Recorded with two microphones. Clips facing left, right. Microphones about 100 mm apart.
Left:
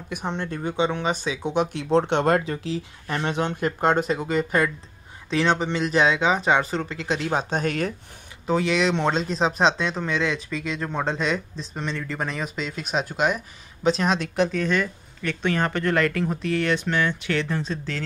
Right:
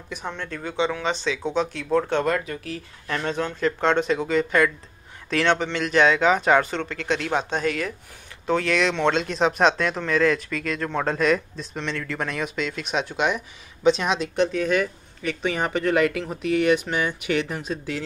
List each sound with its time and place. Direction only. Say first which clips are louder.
0.3 s speech: left 4 dB; 25° left (ahead or behind)
3.6 s speech: right 1 dB; 40° left (ahead or behind)
4.0 s speech: right 2 dB; 5° left (ahead or behind)
4.5 s speech: right 2 dB; 30° left (ahead or behind)
5.8 s speech: right 3 dB; 35° left (ahead or behind)
7.4 s speech: even; 45° left (ahead or behind)
8.5 s speech: even; 5° left (ahead or behind)
10.0 s speech: right 4 dB; 20° left (ahead or behind)
11.2 s speech: right 4 dB; centre (ahead or behind)